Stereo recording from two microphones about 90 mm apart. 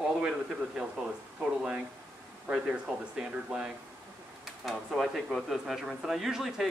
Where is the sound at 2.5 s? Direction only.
10° right (ahead or behind).